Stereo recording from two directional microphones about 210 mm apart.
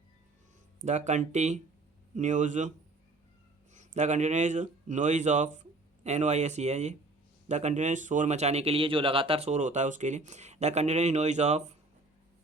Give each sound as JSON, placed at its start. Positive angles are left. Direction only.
{"t": 0.9, "sound": "speech", "side_deg": -35}
{"t": 3.8, "sound": "speech", "side_deg": -35}